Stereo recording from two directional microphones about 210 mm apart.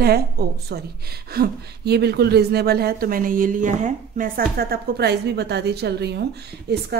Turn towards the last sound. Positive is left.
turn(degrees=-50)  # may be behind; listen again after turning